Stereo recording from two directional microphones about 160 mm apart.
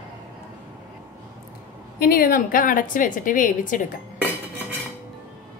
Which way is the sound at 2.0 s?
65° left (ahead or behind).